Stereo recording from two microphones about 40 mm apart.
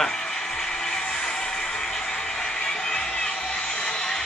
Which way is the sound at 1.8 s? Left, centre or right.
Centre.